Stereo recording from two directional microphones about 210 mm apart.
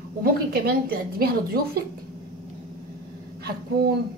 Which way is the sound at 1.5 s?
45° right (ahead or behind).